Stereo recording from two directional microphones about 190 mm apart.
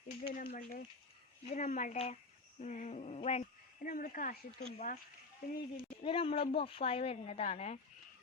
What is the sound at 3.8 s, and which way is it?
Speech, 45° left (ahead or behind).